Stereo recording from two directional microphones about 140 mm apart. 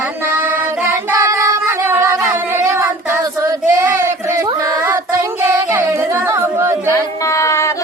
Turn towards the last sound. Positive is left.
turn(degrees=20)  # may be behind; listen again after turning